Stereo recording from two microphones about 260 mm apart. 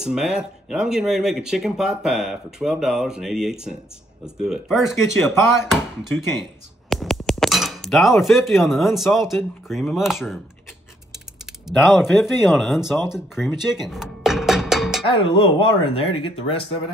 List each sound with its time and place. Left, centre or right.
0.0 s speech: centre
11.6 s speech: centre
15.0 s speech: centre